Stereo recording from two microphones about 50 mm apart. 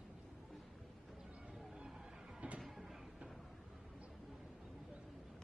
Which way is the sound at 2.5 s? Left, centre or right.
Centre.